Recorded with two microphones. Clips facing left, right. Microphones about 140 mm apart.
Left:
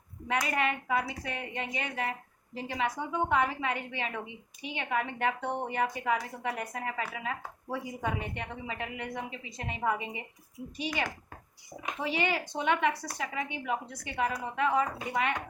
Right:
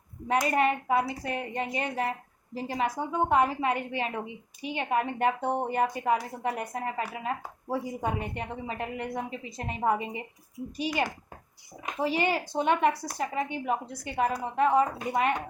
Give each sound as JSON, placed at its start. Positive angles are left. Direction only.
{"t": 0.4, "sound": "a woman's voice", "side_deg": -40}